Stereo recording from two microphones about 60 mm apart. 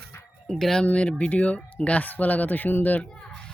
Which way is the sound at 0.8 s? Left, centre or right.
Centre.